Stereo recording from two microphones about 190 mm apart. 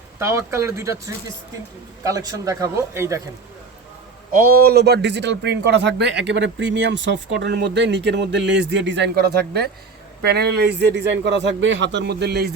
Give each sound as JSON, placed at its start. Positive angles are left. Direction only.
{"t": 0.2, "sound": "speech", "side_deg": -15}
{"t": 4.4, "sound": "speech", "side_deg": -50}